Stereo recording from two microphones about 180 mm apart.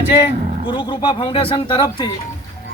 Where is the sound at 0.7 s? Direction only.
25° left (ahead or behind).